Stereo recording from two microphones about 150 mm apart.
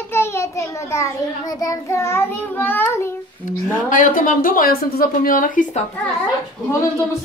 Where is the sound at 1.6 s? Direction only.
20° left (ahead or behind).